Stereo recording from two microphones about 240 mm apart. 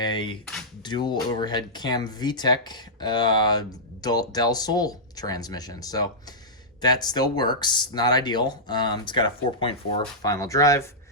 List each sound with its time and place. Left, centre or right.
0.0 s speech: centre